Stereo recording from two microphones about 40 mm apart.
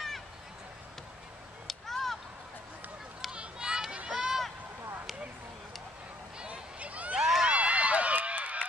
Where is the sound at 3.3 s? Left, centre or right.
Right.